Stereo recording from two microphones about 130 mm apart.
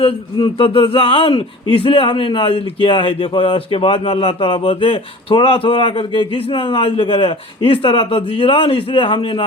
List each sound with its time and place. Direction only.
0.0 s speech: 40° left (ahead or behind)